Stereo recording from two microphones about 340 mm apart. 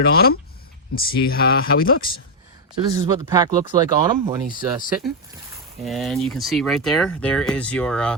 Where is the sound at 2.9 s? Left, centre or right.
Centre.